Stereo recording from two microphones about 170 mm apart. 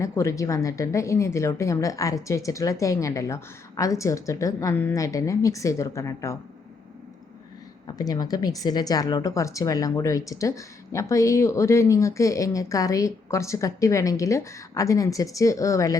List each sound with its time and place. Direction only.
0.0 s a woman's voice: 15° left (ahead or behind)
7.9 s a woman's voice: 20° left (ahead or behind)